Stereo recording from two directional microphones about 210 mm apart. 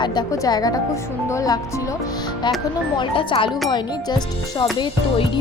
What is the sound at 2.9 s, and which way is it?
Speech, 25° left (ahead or behind).